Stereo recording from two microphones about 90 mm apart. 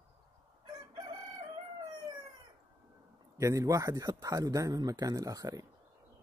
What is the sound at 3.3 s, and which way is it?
Speech, 35° right (ahead or behind).